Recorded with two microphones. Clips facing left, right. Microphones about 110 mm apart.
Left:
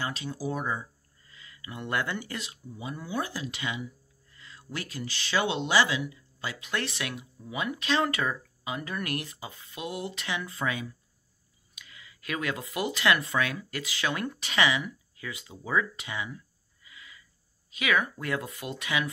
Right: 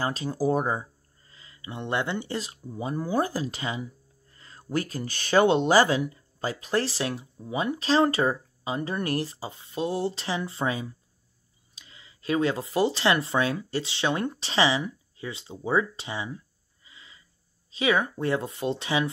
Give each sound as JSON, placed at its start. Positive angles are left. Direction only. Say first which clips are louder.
{"t": 0.0, "sound": "speech", "louder": "right 7 dB", "side_deg": -40}